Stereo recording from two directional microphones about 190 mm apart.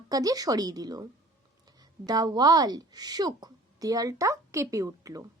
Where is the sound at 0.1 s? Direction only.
20° right (ahead or behind).